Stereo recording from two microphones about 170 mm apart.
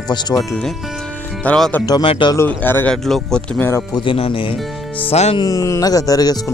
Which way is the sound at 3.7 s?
25° left (ahead or behind).